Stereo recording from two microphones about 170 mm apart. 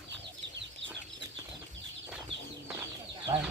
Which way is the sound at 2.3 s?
90° right.